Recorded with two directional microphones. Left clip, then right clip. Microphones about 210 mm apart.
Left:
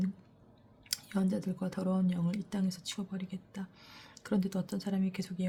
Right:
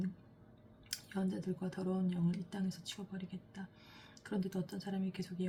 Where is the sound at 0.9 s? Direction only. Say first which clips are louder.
Left 6 dB; 55° left (ahead or behind).